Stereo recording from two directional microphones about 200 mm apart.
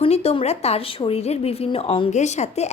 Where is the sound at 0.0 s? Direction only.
30° left (ahead or behind).